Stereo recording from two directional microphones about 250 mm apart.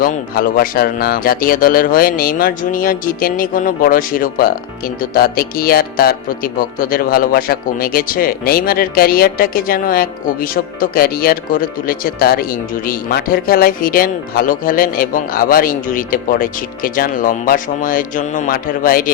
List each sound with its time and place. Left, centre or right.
0.0 s speech: left